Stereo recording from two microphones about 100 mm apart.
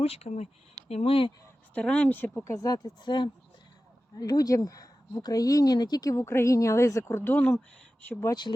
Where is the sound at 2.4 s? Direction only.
40° left (ahead or behind); by 8.3 s 20° left (ahead or behind).